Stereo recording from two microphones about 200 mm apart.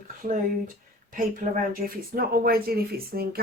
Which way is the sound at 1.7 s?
50° right (ahead or behind).